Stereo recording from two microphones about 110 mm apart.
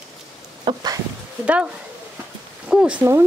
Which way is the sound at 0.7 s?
45° right (ahead or behind).